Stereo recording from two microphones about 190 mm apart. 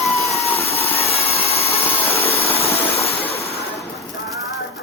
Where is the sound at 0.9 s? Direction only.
30° left (ahead or behind).